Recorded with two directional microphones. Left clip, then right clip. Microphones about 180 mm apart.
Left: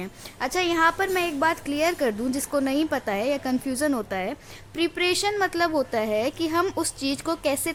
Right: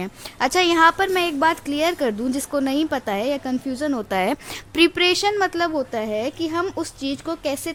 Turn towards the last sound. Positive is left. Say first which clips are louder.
# even
turn(degrees=-10)  # may be behind; listen again after turning